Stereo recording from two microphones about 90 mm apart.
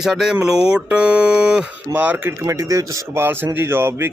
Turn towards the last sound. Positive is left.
turn(degrees=-25)  # may be behind; listen again after turning